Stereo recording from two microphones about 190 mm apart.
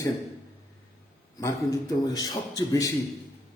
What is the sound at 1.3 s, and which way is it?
A man's voice, 15° left (ahead or behind).